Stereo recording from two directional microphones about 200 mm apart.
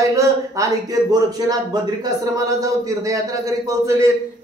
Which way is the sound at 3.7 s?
15° right (ahead or behind).